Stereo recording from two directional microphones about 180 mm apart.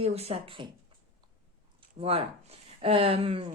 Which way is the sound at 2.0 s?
35° right (ahead or behind).